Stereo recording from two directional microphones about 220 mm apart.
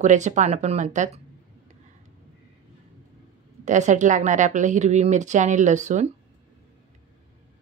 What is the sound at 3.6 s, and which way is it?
Speech, 35° right (ahead or behind).